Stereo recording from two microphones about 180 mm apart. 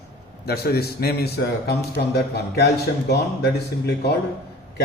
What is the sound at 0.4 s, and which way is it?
A man's voice, 60° left (ahead or behind).